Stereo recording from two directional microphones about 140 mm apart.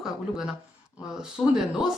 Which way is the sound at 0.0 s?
5° right (ahead or behind).